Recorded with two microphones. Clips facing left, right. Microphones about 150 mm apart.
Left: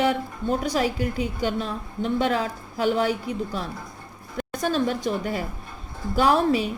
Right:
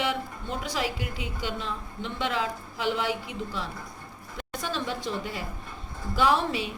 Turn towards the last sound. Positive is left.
turn(degrees=40)  # may be behind; listen again after turning